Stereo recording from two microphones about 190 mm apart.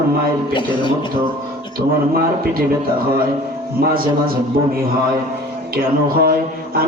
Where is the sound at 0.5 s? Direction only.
25° left (ahead or behind).